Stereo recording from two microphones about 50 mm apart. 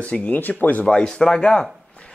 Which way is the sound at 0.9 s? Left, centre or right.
Centre.